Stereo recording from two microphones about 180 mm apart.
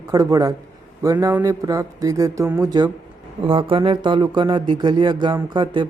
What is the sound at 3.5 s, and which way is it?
Speech, 30° right (ahead or behind).